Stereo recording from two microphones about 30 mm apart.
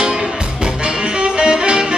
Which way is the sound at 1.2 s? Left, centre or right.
Right.